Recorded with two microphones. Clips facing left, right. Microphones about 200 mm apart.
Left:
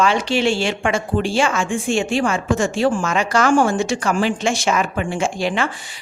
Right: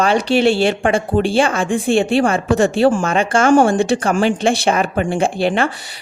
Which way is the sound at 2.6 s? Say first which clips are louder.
Right 6 dB; 60° right (ahead or behind).